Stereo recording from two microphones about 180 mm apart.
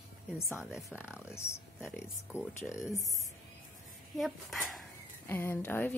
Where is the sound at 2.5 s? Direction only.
15° left (ahead or behind).